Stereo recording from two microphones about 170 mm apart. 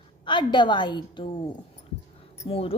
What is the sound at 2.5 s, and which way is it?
Speech, 35° left (ahead or behind).